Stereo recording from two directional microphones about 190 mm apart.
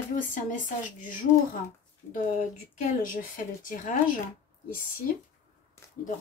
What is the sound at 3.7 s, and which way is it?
Speech, 45° left (ahead or behind).